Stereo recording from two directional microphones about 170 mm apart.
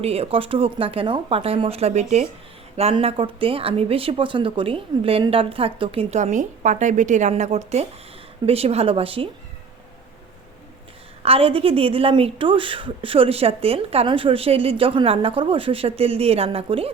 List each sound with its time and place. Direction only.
0.0 s a woman's voice: 35° right (ahead or behind)
11.2 s a woman's voice: 35° right (ahead or behind)